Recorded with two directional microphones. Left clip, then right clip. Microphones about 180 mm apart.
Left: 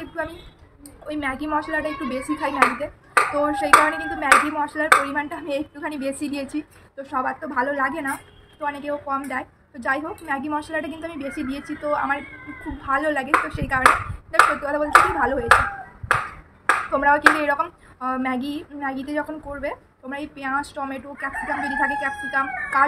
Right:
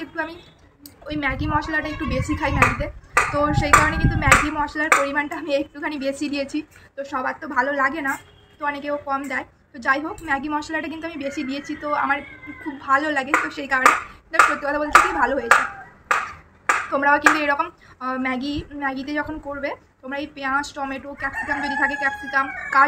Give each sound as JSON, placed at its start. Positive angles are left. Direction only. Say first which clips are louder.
{"t": 0.0, "sound": "a sound", "louder": "right 1 dB", "side_deg": 5}
{"t": 1.0, "sound": "clapping", "louder": "right 2 dB", "side_deg": 5}
{"t": 16.9, "sound": "speech", "louder": "even", "side_deg": 5}
{"t": 17.4, "sound": "clapping", "louder": "right 1 dB", "side_deg": 5}